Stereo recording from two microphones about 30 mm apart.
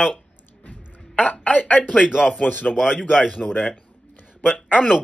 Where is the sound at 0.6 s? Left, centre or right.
Left.